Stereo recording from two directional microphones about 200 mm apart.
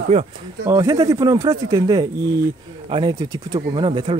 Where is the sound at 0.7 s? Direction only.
20° right (ahead or behind).